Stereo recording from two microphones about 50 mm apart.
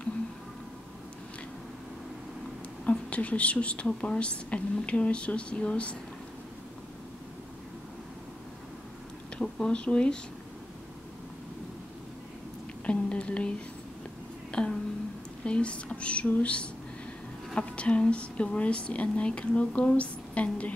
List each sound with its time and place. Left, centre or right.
2.8 s a woman's voice: left
9.4 s speech: centre
12.8 s speech: left
14.5 s speech: centre